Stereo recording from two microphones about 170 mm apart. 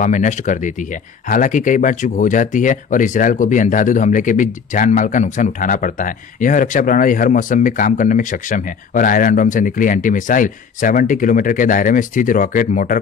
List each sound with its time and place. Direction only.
0.0 s speech: 45° left (ahead or behind)